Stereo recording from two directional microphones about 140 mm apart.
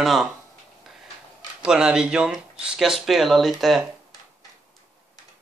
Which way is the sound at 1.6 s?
5° right (ahead or behind).